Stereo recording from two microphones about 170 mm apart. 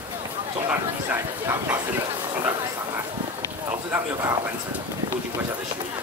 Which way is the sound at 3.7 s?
15° right (ahead or behind).